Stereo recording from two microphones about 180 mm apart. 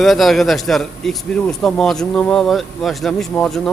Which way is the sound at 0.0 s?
Centre (ahead or behind).